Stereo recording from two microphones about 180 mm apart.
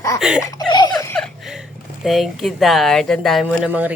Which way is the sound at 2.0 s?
Centre (ahead or behind).